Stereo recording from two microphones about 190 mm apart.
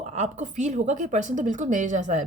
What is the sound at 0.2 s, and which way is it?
Speech, 40° right (ahead or behind).